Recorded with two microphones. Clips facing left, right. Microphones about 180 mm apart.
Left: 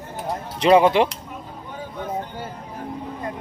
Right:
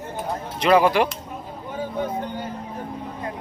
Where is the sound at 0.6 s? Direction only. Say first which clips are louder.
Left 2 dB; 25° left (ahead or behind).